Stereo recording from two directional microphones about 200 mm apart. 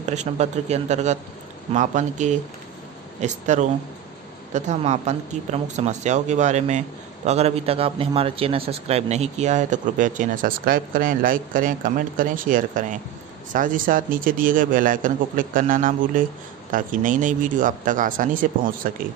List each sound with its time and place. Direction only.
0.1 s a man's voice: 35° right (ahead or behind)